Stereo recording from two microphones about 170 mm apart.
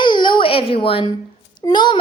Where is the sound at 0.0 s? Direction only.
25° left (ahead or behind).